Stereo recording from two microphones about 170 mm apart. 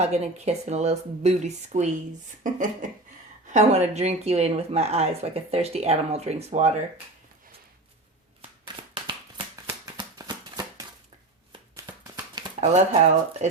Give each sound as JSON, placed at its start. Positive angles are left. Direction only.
{"t": 0.0, "sound": "speech", "side_deg": -40}
{"t": 8.4, "sound": "a sound", "side_deg": -30}
{"t": 12.5, "sound": "speech", "side_deg": -40}